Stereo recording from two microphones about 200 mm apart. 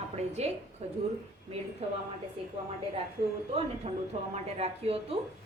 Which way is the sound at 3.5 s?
30° right (ahead or behind).